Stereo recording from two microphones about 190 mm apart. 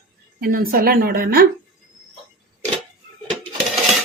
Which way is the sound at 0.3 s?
50° right (ahead or behind).